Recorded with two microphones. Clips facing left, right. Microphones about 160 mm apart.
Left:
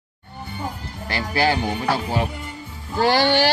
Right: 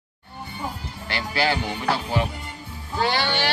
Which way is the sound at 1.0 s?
30° left (ahead or behind).